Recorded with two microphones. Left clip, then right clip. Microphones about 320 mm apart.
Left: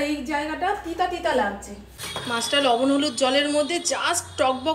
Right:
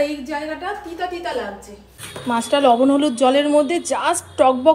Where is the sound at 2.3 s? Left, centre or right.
Centre.